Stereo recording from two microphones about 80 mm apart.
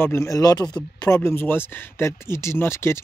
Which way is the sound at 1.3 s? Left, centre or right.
Left.